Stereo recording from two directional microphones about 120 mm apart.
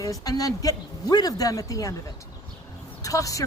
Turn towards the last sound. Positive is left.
turn(degrees=30)  # may be behind; listen again after turning